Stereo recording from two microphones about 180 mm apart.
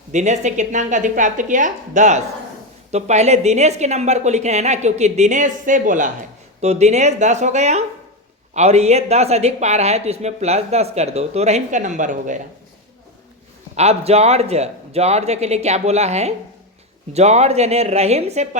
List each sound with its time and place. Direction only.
0.1 s a woman's voice: 40° right (ahead or behind)
13.7 s a woman's voice: 35° right (ahead or behind)